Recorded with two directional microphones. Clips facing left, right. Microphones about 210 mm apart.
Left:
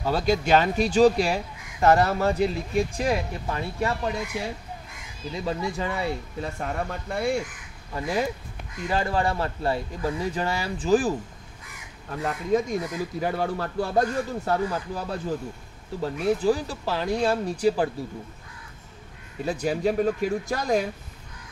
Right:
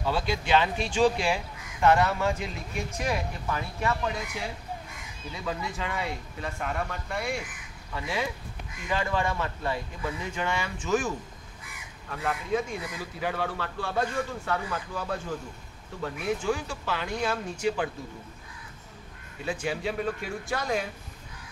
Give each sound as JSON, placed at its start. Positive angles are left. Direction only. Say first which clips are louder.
{"t": 0.0, "sound": "speech", "louder": "left 5 dB", "side_deg": 40}
{"t": 5.3, "sound": "speech", "louder": "left 5 dB", "side_deg": 35}
{"t": 19.4, "sound": "speech", "louder": "left 6 dB", "side_deg": 40}